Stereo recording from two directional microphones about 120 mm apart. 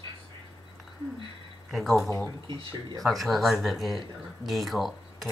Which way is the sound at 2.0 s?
20° left (ahead or behind).